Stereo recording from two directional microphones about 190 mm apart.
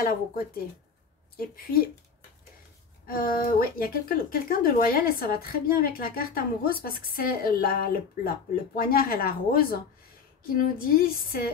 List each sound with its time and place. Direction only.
0.0 s speech: 50° left (ahead or behind)
3.1 s speech: 50° left (ahead or behind)